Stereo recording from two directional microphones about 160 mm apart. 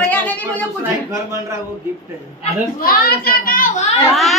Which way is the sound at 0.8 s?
20° right (ahead or behind).